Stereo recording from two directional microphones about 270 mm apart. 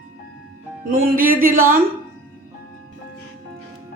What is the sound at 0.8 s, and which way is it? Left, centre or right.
Speech, right.